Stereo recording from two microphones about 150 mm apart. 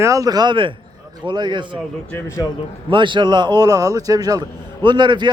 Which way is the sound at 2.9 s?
30° right (ahead or behind).